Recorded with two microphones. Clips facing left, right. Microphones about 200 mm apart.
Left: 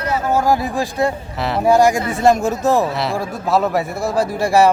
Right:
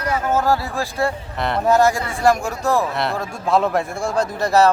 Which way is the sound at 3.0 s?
5° left (ahead or behind).